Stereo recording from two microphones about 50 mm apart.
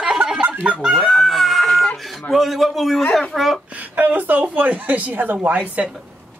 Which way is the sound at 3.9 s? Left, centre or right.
Right.